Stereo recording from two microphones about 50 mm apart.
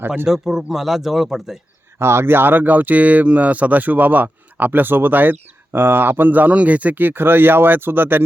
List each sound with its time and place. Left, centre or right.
0.3 s speech: centre
2.0 s speech: right